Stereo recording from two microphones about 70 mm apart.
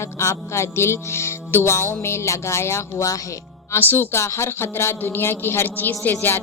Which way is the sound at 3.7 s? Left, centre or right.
Left.